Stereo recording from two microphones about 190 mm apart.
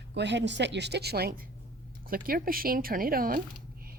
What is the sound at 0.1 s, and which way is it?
A woman's voice, 65° right (ahead or behind).